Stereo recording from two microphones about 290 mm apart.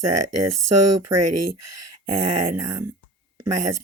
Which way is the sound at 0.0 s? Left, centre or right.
Right.